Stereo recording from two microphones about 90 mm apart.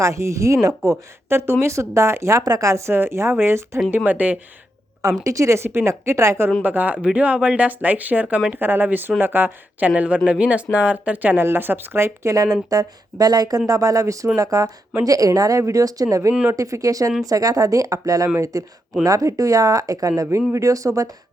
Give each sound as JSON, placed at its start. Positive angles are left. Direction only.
{"t": 0.0, "sound": "speech", "side_deg": -35}
{"t": 3.9, "sound": "speech", "side_deg": -20}
{"t": 5.2, "sound": "speech", "side_deg": -35}
{"t": 6.6, "sound": "speech", "side_deg": -20}
{"t": 12.7, "sound": "speech", "side_deg": -45}